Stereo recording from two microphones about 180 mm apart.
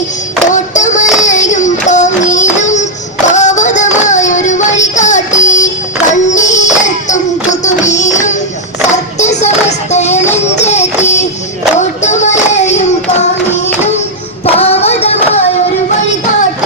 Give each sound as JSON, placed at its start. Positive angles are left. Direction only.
{"t": 0.5, "sound": "music", "side_deg": 40}
{"t": 3.2, "sound": "child singing", "side_deg": 40}
{"t": 6.1, "sound": "music", "side_deg": 40}
{"t": 11.8, "sound": "child singing", "side_deg": 40}
{"t": 14.4, "sound": "child singing", "side_deg": 35}